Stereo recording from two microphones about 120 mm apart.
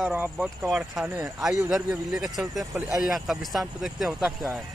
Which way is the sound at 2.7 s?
20° right (ahead or behind).